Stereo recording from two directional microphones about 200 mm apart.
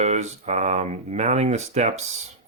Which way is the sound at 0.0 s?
35° right (ahead or behind).